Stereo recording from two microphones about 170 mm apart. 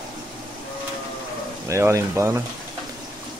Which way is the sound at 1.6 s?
15° right (ahead or behind).